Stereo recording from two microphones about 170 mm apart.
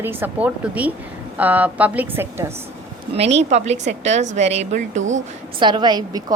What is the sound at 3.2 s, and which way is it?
A woman's voice, 40° right (ahead or behind).